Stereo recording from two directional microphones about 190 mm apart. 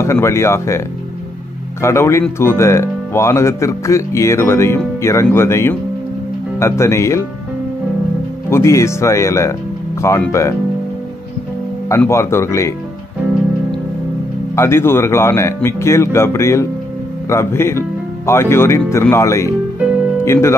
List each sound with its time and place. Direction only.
0.0 s speech: 15° left (ahead or behind)
8.5 s speech: 15° left (ahead or behind)
11.9 s speech: 15° left (ahead or behind)
14.5 s speech: 15° left (ahead or behind)